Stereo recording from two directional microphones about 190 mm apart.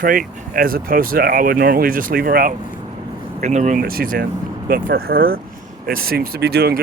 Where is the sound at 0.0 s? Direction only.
50° right (ahead or behind).